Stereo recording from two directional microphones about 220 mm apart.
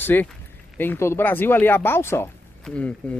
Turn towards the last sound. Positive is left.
turn(degrees=5)  # may be behind; listen again after turning